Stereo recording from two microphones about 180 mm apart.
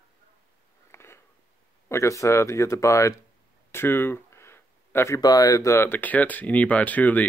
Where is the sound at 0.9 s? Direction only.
15° left (ahead or behind).